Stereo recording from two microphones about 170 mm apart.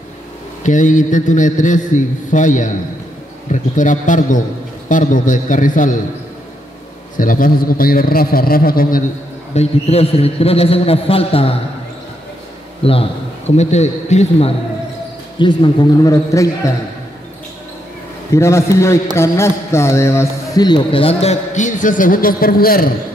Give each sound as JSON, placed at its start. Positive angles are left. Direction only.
{"t": 0.7, "sound": "a man's voice", "side_deg": 50}
{"t": 7.2, "sound": "a man's voice", "side_deg": 55}
{"t": 9.5, "sound": "a man's voice", "side_deg": 40}
{"t": 12.8, "sound": "a man's voice", "side_deg": 35}
{"t": 15.3, "sound": "a man's voice", "side_deg": 25}
{"t": 18.3, "sound": "a man's voice", "side_deg": 15}